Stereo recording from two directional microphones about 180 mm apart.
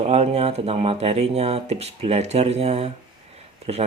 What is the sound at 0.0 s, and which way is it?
Speech, 35° right (ahead or behind).